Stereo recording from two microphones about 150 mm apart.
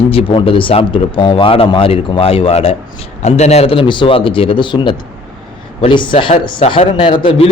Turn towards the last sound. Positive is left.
turn(degrees=35)  # may be behind; listen again after turning